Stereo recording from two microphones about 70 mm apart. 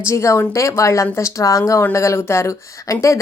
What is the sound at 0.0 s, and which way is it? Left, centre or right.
Speech, left.